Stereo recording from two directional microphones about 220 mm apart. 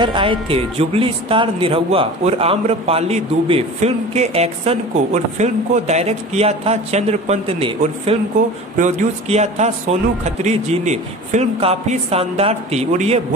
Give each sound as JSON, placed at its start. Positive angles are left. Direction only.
{"t": 0.0, "sound": "speech", "side_deg": -20}